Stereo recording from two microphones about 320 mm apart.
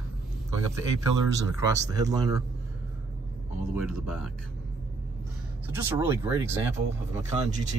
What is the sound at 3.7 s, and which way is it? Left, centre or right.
Speech, centre.